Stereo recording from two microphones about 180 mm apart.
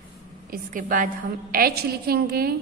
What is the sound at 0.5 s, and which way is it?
A woman's voice, 50° right (ahead or behind).